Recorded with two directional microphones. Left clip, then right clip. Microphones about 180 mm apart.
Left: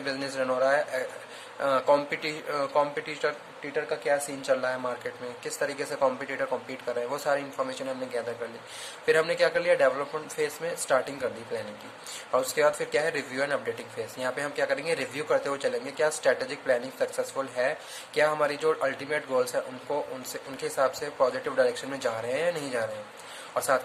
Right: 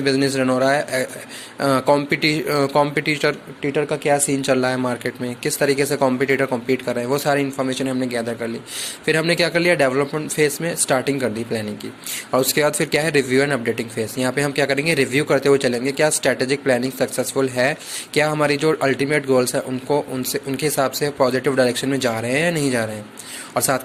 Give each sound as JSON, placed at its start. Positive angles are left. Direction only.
{"t": 0.0, "sound": "speech", "side_deg": -25}